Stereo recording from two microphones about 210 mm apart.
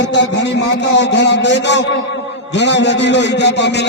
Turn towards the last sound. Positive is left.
turn(degrees=55)  # may be behind; listen again after turning